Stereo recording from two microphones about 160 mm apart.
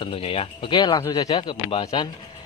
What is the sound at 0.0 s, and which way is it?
Speech, 35° left (ahead or behind).